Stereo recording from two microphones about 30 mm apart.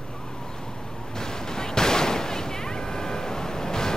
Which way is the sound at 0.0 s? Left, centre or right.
Left.